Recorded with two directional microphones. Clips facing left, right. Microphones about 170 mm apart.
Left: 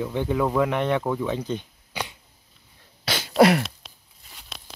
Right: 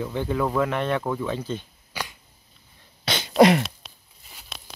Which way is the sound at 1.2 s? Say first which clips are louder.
Left 2 dB; 15° left (ahead or behind).